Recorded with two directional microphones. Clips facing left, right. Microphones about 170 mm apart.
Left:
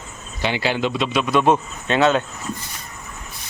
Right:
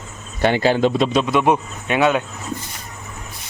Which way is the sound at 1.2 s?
20° right (ahead or behind).